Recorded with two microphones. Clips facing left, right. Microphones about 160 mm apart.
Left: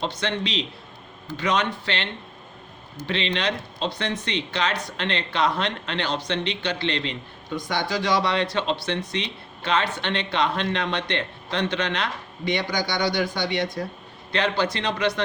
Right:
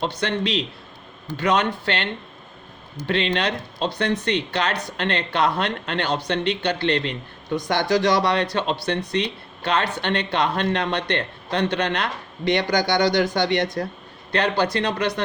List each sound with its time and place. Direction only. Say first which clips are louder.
0.0 s speech: right 3 dB; 55° right (ahead or behind)
3.1 s speech: right 3 dB; 55° right (ahead or behind)
7.9 s speech: right 4 dB; 45° right (ahead or behind)
12.5 s speech: right 5 dB; 70° right (ahead or behind)
13.8 s speech: right 3 dB; 60° right (ahead or behind)